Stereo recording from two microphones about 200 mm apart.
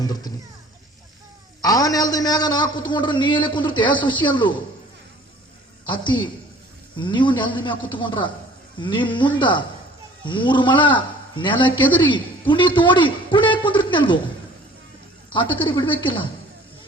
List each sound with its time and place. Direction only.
0.0 s a man's voice: 20° left (ahead or behind)
1.6 s a man's voice: 20° left (ahead or behind)
5.9 s a man's voice: 25° left (ahead or behind)
15.3 s a man's voice: 25° left (ahead or behind)